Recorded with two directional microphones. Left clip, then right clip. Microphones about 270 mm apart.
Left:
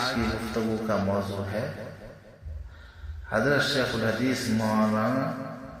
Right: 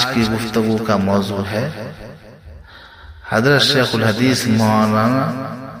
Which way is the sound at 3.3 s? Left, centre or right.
Right.